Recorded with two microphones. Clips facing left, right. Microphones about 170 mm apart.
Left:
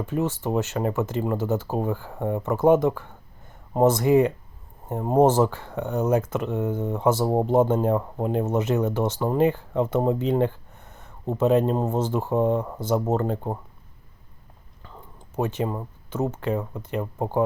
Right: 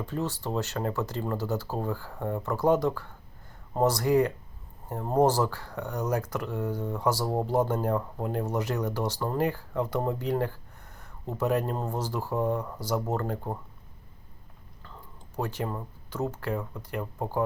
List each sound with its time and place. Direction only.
0.0 s speech: 20° left (ahead or behind)
15.4 s speech: 20° left (ahead or behind)